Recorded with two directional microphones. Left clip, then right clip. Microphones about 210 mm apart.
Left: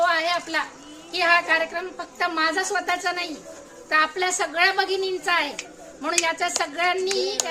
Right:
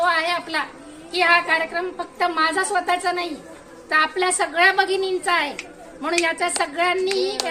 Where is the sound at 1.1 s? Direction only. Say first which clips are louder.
Right 2 dB; 5° left (ahead or behind).